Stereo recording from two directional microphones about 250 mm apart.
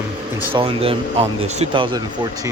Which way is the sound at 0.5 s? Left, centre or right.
Right.